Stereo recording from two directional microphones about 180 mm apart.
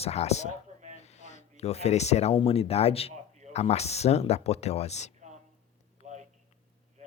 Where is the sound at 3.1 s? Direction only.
40° right (ahead or behind).